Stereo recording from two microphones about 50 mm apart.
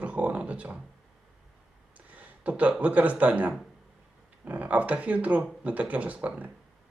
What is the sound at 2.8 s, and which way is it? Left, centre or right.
Speech, right.